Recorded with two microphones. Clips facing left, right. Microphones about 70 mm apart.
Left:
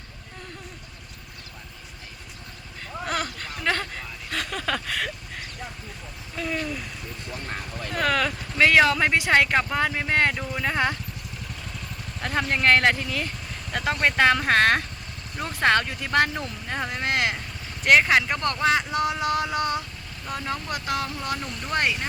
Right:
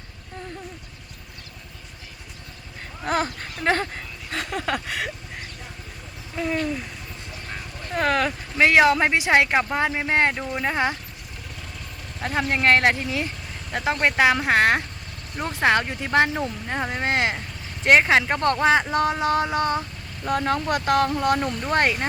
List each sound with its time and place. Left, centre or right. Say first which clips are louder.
3.1 s speech: right 6 dB; right
6.3 s speech: right 4 dB; right
7.9 s speech: right 2 dB; right
12.2 s speech: right 1 dB; centre; by 19.8 s right
20.2 s speech: right 8 dB; right